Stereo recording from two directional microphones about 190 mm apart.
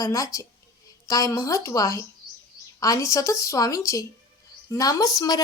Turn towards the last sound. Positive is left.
turn(degrees=20)  # may be behind; listen again after turning